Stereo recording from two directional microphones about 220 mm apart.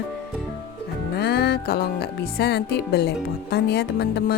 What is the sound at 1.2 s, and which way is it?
Speech, 45° left (ahead or behind).